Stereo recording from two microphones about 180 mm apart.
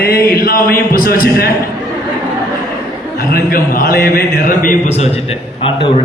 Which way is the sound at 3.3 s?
55° left (ahead or behind).